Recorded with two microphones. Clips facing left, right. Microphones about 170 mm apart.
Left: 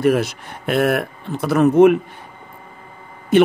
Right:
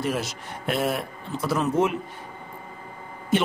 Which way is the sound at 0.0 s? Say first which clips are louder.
Left 11 dB; 60° left (ahead or behind).